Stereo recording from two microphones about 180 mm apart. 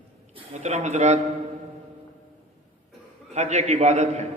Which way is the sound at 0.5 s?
40° right (ahead or behind).